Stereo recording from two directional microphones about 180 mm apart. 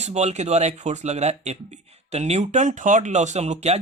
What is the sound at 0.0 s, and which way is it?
Speech, 40° right (ahead or behind).